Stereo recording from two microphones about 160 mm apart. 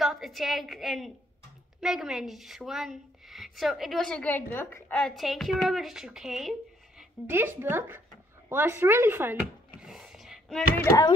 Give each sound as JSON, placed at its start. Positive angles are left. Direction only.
{"t": 0.0, "sound": "a woman's voice", "side_deg": 0}
{"t": 7.2, "sound": "speech", "side_deg": -15}
{"t": 9.8, "sound": "a sound", "side_deg": -5}
{"t": 10.8, "sound": "speech", "side_deg": 20}